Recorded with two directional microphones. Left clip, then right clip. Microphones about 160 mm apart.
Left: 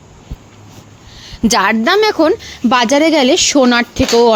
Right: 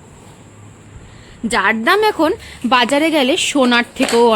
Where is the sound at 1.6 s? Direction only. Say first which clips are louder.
Right 1 dB; 30° left (ahead or behind).